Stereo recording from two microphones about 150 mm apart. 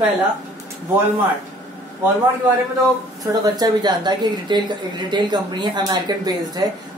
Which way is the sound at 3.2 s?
25° right (ahead or behind).